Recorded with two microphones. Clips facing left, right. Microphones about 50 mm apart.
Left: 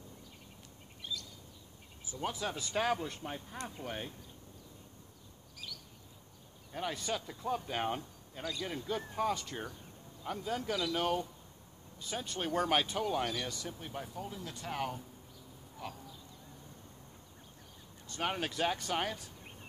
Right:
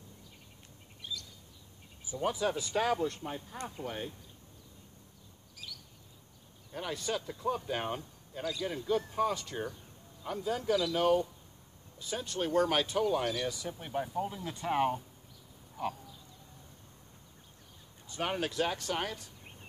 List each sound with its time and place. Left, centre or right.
2.1 s speech: centre
6.7 s speech: centre
14.2 s speech: right
18.0 s speech: centre